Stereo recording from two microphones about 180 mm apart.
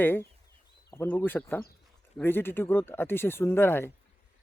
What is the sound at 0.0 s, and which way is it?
Speech, 10° left (ahead or behind).